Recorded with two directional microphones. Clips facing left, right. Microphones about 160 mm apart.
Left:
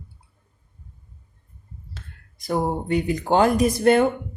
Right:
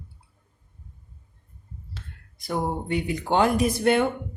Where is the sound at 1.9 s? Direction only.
45° left (ahead or behind).